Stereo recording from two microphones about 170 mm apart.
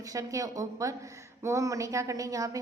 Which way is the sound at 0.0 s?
20° right (ahead or behind).